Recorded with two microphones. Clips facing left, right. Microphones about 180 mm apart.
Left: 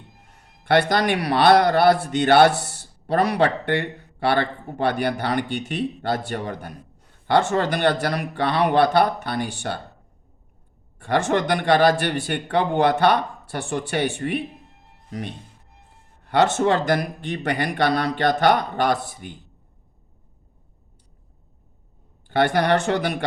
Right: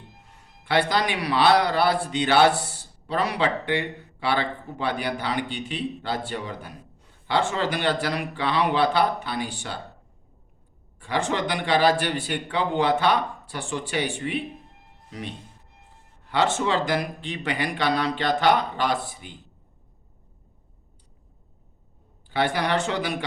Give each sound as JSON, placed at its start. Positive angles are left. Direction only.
{"t": 0.7, "sound": "speech", "side_deg": 60}
{"t": 11.0, "sound": "speech", "side_deg": 55}
{"t": 16.2, "sound": "speech", "side_deg": 55}
{"t": 22.5, "sound": "speech", "side_deg": 55}